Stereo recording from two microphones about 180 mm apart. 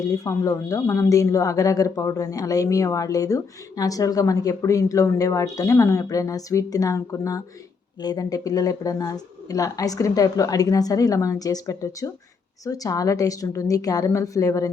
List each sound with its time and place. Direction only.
0.3 s speech: 20° left (ahead or behind)